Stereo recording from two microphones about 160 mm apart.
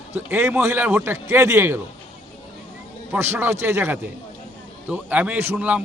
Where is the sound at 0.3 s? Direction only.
15° right (ahead or behind).